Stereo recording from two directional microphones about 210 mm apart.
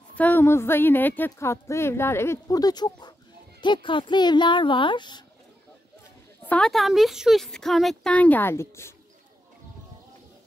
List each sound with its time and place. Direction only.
0.1 s a woman's voice: 10° left (ahead or behind)
6.4 s speech: 5° left (ahead or behind)